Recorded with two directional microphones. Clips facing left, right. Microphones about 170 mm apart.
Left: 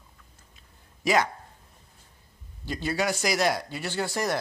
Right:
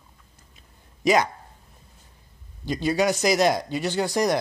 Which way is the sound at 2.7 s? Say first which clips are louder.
Right 5 dB; 15° right (ahead or behind).